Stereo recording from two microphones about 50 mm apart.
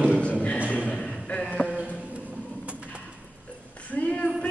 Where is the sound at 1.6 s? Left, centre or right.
Right.